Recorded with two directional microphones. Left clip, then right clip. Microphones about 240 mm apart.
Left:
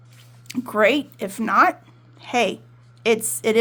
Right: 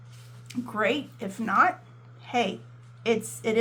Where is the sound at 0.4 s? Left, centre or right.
Left.